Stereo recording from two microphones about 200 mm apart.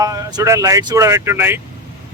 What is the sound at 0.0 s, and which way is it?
Speech, 15° right (ahead or behind).